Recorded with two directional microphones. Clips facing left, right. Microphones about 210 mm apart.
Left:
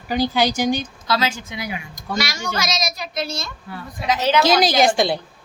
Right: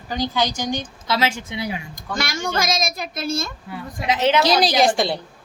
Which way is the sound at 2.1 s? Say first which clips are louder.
Right 1 dB; 50° right (ahead or behind).